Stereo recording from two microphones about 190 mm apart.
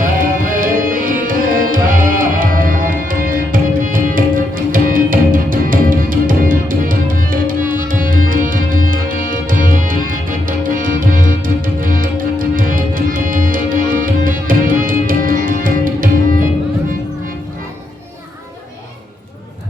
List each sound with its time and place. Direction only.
0.0 s music: 45° right (ahead or behind)